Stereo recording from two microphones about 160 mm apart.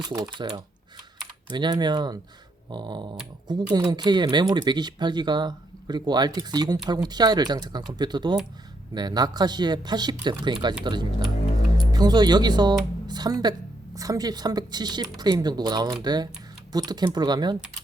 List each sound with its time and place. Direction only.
0.1 s speech: 25° right (ahead or behind)
1.5 s speech: 25° right (ahead or behind)
11.9 s speech: 25° right (ahead or behind)